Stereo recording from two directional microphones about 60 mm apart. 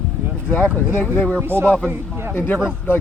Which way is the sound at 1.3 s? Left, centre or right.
Right.